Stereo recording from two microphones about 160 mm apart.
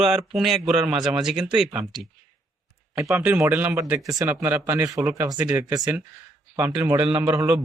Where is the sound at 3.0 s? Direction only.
10° right (ahead or behind).